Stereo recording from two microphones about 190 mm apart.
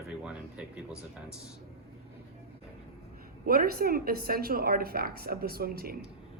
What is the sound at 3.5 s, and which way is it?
A woman's voice, 50° right (ahead or behind).